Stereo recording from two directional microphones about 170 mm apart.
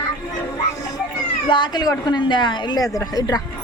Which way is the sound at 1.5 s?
25° left (ahead or behind).